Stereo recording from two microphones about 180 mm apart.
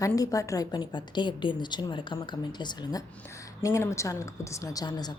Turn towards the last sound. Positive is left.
turn(degrees=20)  # may be behind; listen again after turning